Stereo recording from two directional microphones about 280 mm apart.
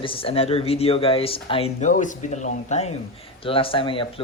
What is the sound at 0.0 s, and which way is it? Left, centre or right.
Speech, centre.